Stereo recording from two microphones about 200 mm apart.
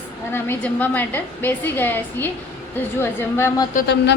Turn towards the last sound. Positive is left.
turn(degrees=50)  # may be behind; listen again after turning